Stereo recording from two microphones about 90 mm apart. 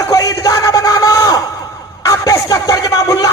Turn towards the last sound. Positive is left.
turn(degrees=40)  # may be behind; listen again after turning